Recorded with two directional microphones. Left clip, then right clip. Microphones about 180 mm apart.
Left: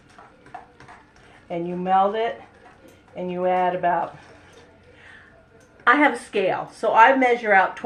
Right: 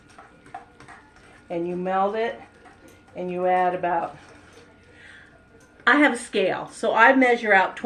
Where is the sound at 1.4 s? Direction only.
10° right (ahead or behind).